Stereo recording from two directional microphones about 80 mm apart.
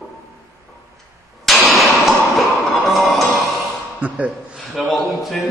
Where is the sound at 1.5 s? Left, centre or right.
Centre.